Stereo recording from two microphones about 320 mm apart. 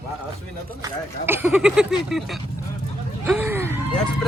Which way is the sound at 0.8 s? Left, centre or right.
Centre.